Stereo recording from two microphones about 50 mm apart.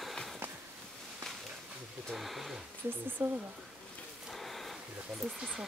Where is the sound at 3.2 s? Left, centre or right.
Right.